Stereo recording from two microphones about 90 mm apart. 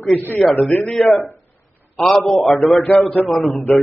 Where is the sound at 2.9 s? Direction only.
20° left (ahead or behind).